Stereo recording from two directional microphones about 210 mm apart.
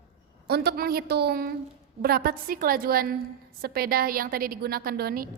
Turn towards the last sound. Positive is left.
turn(degrees=-45)  # may be behind; listen again after turning